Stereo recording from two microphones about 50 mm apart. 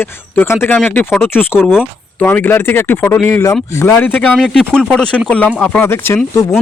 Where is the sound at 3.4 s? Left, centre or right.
Left.